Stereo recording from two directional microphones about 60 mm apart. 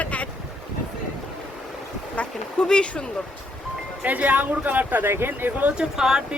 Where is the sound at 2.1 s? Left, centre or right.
Centre.